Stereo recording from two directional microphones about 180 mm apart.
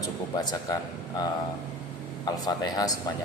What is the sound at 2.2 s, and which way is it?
Speech, 20° left (ahead or behind).